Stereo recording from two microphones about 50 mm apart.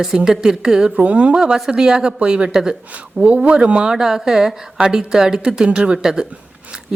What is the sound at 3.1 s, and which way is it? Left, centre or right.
Speech, right.